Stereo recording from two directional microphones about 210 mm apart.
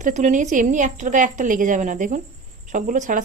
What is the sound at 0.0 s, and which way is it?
A woman's voice, 35° right (ahead or behind).